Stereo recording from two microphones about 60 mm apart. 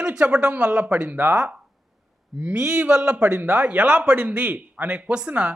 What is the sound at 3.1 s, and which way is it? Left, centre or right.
Speech, right.